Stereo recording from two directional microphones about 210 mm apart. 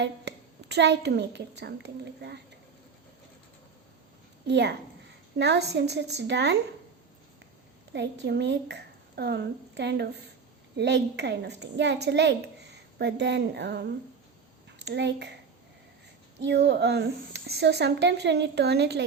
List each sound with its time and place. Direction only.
0.0 s a woman's voice: 55° right (ahead or behind)
4.4 s a woman's voice: 55° right (ahead or behind)
7.9 s a woman's voice: 55° right (ahead or behind)
16.4 s speech: 55° right (ahead or behind)